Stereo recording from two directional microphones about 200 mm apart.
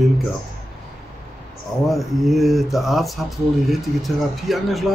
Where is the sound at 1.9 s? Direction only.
Centre (ahead or behind).